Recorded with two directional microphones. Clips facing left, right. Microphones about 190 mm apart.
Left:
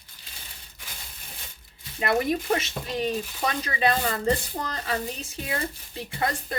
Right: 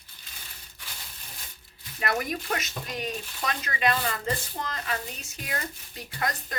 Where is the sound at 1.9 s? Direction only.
25° left (ahead or behind).